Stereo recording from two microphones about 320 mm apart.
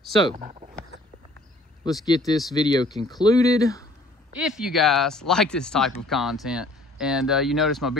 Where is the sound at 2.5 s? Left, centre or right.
Centre.